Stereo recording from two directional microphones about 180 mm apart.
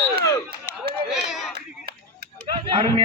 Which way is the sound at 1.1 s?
Centre (ahead or behind).